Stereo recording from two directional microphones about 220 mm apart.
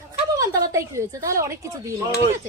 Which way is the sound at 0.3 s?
15° right (ahead or behind).